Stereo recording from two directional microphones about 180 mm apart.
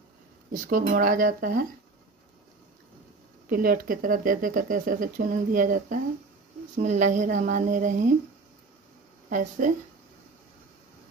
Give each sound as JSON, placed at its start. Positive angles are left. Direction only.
{"t": 0.5, "sound": "speech", "side_deg": -50}
{"t": 3.4, "sound": "speech", "side_deg": -55}
{"t": 9.3, "sound": "speech", "side_deg": -45}